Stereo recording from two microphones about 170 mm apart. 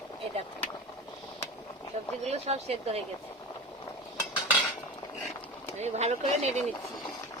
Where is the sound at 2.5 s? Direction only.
35° right (ahead or behind).